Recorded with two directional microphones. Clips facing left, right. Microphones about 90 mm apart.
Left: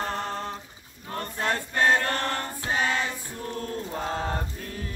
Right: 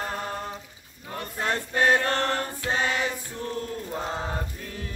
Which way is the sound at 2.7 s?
20° right (ahead or behind).